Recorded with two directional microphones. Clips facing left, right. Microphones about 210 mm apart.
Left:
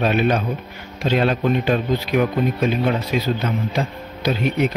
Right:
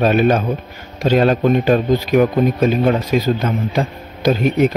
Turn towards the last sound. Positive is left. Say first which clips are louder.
# right 5 dB
turn(degrees=-45)  # may be behind; listen again after turning